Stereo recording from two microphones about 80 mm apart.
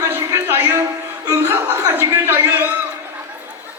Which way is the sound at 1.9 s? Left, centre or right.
Right.